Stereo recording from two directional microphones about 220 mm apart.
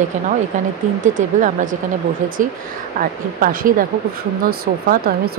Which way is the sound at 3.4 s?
40° right (ahead or behind).